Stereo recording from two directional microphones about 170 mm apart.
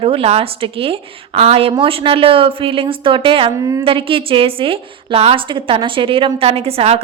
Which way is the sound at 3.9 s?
30° right (ahead or behind).